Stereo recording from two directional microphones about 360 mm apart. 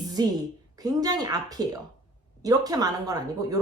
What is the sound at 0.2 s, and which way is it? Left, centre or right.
Speech, centre.